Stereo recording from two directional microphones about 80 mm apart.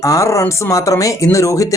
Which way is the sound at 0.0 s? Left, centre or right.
Left.